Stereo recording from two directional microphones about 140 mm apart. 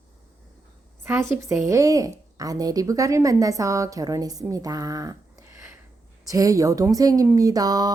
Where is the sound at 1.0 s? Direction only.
15° right (ahead or behind).